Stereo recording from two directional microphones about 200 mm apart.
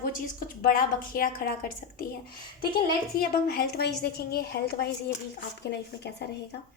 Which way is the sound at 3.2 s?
50° left (ahead or behind).